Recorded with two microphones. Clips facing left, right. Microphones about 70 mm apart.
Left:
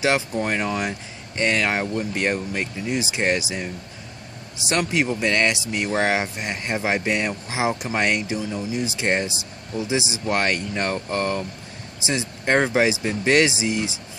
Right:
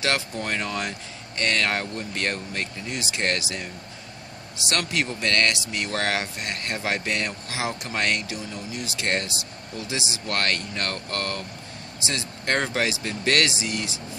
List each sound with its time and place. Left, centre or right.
0.0 s speech: centre